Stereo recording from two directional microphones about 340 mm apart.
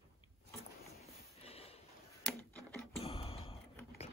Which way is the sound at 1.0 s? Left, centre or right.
Centre.